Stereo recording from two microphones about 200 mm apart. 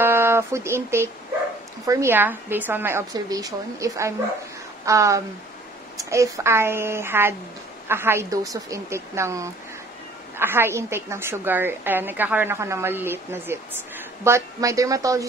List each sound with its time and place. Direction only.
0.0 s a woman's voice: 10° right (ahead or behind)